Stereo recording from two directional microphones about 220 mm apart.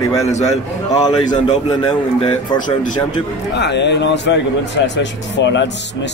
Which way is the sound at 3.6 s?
50° left (ahead or behind).